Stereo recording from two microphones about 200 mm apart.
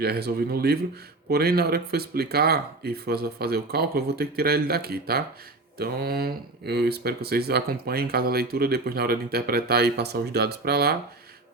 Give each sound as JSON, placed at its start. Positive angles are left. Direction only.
{"t": 0.0, "sound": "speech", "side_deg": -55}